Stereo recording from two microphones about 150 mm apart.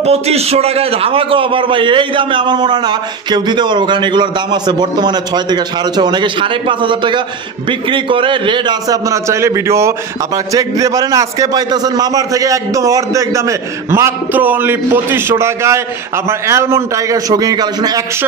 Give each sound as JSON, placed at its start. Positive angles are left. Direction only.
{"t": 0.0, "sound": "a man's voice", "side_deg": -45}